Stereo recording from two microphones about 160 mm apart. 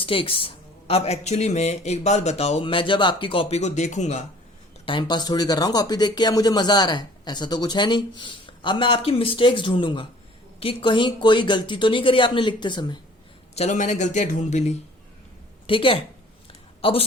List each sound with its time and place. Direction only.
0.0 s speech: 35° left (ahead or behind)
4.9 s speech: 30° left (ahead or behind)
13.6 s a man's voice: 50° left (ahead or behind)
15.6 s speech: 35° left (ahead or behind)
16.5 s a sound: 35° left (ahead or behind)